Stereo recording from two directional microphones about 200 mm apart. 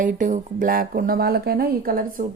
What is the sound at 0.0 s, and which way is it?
A woman's voice, 40° right (ahead or behind).